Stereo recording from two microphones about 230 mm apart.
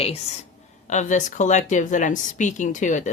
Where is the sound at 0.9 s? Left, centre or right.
Left.